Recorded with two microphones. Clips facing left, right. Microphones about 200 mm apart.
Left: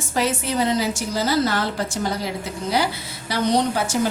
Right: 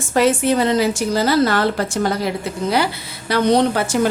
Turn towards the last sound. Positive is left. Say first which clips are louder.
# right 5 dB
turn(degrees=-60)  # may be behind; listen again after turning